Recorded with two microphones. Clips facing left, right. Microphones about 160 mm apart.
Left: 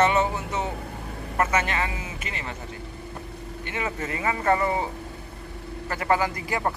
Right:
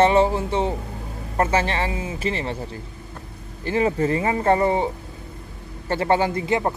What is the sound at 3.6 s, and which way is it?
Speech, 35° right (ahead or behind).